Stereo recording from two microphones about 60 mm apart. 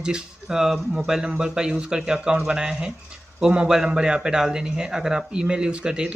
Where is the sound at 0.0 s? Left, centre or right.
Centre.